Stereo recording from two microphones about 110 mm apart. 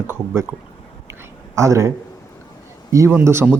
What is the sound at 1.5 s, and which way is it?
Speech, 25° right (ahead or behind).